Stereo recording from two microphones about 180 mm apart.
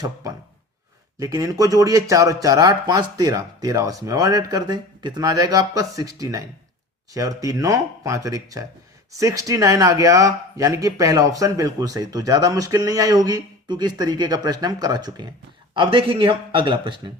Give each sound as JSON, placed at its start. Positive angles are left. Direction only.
{"t": 1.2, "sound": "speech", "side_deg": -20}